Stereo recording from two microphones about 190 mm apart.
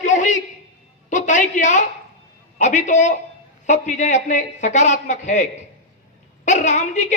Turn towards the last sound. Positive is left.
turn(degrees=40)  # may be behind; listen again after turning